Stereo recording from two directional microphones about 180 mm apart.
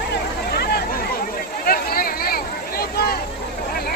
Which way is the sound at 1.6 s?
55° left (ahead or behind).